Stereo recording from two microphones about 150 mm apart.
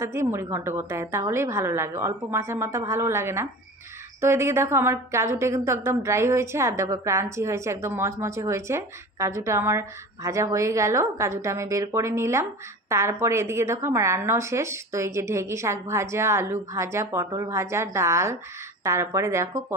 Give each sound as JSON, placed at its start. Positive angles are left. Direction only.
{"t": 0.0, "sound": "a woman's voice", "side_deg": -15}